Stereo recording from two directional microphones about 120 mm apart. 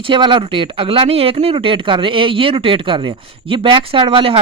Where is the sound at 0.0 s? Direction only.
45° right (ahead or behind).